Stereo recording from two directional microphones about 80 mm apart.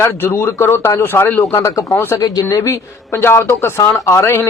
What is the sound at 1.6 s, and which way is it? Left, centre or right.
Speech, left.